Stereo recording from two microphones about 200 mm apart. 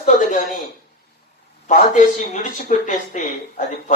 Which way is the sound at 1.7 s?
40° left (ahead or behind).